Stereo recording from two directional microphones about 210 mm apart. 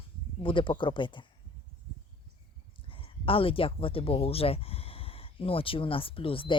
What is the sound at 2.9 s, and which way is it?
Speech, 25° left (ahead or behind).